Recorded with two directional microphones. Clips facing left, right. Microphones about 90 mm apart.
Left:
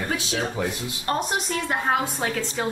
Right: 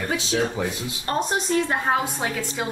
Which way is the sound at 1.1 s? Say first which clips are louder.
Right 3 dB; 30° right (ahead or behind).